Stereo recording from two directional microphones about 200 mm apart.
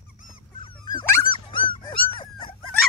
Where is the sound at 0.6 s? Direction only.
25° left (ahead or behind).